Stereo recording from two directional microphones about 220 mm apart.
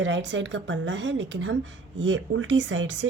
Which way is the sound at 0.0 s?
55° right (ahead or behind).